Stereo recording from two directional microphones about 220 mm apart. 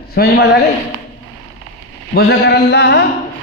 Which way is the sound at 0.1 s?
45° left (ahead or behind).